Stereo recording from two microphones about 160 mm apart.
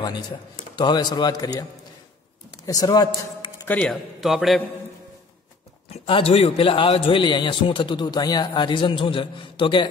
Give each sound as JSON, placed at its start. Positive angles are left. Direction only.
{"t": 0.7, "sound": "a man's voice", "side_deg": 25}
{"t": 3.6, "sound": "a man's voice", "side_deg": 10}
{"t": 3.9, "sound": "a man's voice", "side_deg": 0}
{"t": 5.9, "sound": "a man's voice", "side_deg": 35}